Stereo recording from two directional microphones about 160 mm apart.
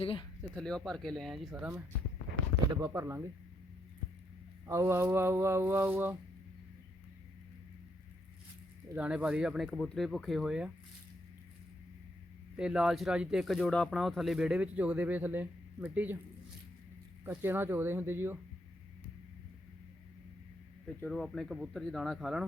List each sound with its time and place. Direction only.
0.0 s speech: 35° left (ahead or behind)
0.5 s speech: 5° left (ahead or behind)
2.8 s speech: 15° right (ahead or behind)
4.6 s speech: 20° right (ahead or behind)
9.0 s speech: 5° right (ahead or behind)
12.5 s speech: 5° right (ahead or behind)
17.2 s speech: 15° right (ahead or behind)
20.8 s speech: 5° left (ahead or behind)